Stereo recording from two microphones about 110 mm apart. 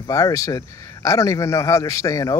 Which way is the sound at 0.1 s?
30° left (ahead or behind).